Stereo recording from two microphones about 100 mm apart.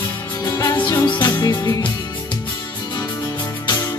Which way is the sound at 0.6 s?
50° left (ahead or behind).